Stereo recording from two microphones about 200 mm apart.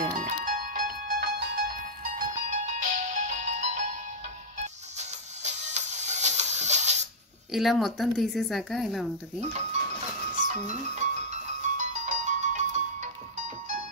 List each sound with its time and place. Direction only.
0.2 s music: 40° right (ahead or behind)
4.9 s music: 35° right (ahead or behind)
7.5 s a woman's voice: centre (ahead or behind)
10.3 s music: 35° right (ahead or behind)